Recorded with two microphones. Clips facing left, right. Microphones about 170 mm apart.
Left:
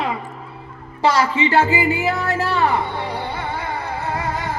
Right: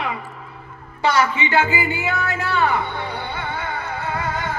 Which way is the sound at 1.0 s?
35° left (ahead or behind).